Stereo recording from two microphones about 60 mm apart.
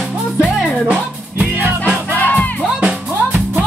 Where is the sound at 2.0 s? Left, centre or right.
Left.